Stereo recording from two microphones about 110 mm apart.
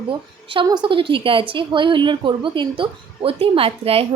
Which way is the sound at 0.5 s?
40° right (ahead or behind).